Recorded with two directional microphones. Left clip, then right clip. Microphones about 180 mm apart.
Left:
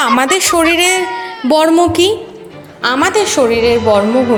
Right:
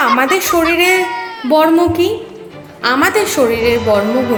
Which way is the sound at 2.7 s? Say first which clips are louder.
Even; 15° left (ahead or behind).